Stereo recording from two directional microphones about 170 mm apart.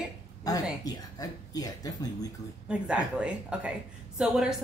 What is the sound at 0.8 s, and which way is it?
Speech, 20° left (ahead or behind).